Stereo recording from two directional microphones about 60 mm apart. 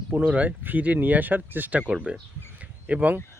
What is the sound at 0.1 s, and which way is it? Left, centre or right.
Speech, right.